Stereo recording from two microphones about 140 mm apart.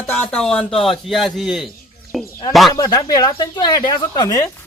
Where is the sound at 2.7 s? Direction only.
25° left (ahead or behind).